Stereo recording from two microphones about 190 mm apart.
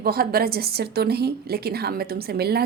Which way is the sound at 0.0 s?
50° right (ahead or behind).